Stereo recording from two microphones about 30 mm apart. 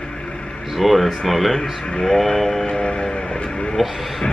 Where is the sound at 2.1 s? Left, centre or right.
Centre.